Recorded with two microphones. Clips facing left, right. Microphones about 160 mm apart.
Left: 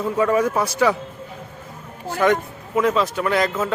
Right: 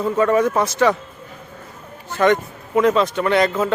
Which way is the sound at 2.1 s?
5° left (ahead or behind).